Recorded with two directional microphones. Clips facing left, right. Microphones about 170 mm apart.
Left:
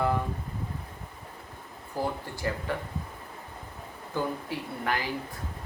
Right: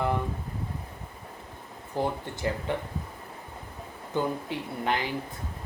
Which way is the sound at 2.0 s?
20° right (ahead or behind).